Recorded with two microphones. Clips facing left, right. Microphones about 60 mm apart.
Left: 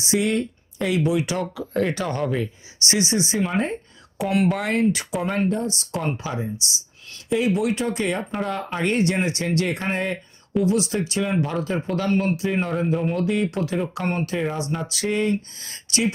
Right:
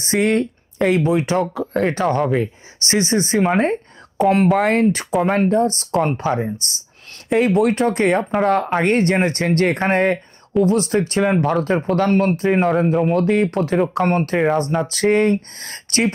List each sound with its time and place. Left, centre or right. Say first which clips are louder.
0.0 s speech: right 5 dB; right
1.9 s speech: right 7 dB; right
3.4 s speech: right 7 dB; right
4.2 s speech: right 7 dB; right
10.6 s speech: right 5 dB; right
12.9 s speech: right 6 dB; centre
13.1 s speech: right 6 dB; right